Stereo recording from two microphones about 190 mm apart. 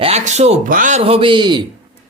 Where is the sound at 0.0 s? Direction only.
35° right (ahead or behind).